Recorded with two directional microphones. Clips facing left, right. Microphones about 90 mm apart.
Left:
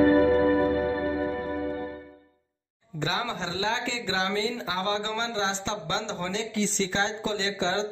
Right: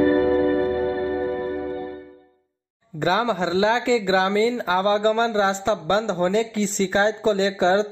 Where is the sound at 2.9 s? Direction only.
50° right (ahead or behind).